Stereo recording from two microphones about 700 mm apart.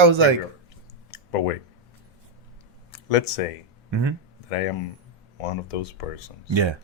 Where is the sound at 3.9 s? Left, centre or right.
Right.